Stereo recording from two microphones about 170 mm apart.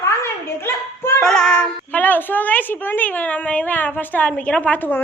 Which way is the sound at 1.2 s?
5° left (ahead or behind).